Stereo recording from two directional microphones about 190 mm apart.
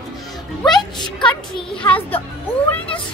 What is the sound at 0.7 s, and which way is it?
Music, 25° left (ahead or behind).